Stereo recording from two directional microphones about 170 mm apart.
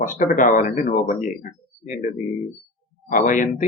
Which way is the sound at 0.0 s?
50° left (ahead or behind).